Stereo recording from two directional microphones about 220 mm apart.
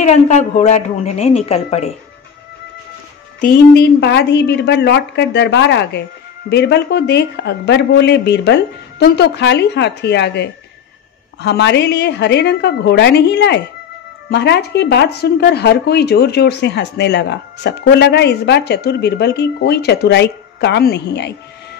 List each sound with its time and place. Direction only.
0.0 s a woman's voice: 30° left (ahead or behind)
3.3 s speech: 45° left (ahead or behind)